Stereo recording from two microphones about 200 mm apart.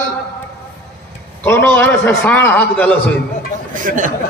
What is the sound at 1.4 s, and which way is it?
A man's voice, 10° left (ahead or behind).